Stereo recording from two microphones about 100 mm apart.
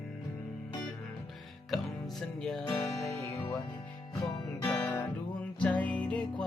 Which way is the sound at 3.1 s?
25° left (ahead or behind).